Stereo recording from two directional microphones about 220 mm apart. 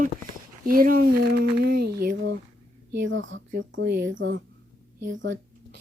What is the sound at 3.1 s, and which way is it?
Speech, 60° right (ahead or behind).